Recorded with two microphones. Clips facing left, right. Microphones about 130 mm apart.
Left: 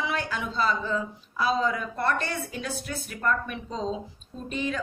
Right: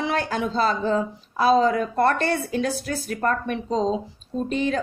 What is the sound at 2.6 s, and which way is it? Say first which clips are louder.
A woman's voice: right 8 dB; 35° right (ahead or behind).